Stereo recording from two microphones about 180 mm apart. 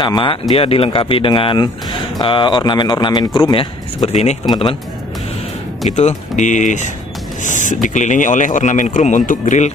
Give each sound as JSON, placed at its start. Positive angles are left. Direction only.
{"t": 0.0, "sound": "speech", "side_deg": 25}
{"t": 4.5, "sound": "speech", "side_deg": 25}
{"t": 5.9, "sound": "speech", "side_deg": 40}